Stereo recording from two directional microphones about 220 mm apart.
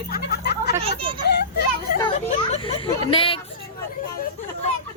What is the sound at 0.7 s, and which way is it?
Speech, 25° right (ahead or behind).